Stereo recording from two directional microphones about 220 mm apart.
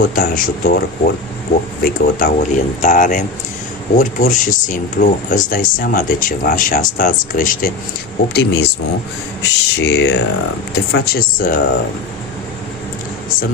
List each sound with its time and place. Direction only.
0.1 s speech: 40° left (ahead or behind)
1.8 s speech: 40° left (ahead or behind)